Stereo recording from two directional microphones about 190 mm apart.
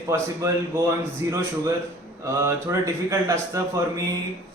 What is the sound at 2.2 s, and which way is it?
Speech, 15° right (ahead or behind).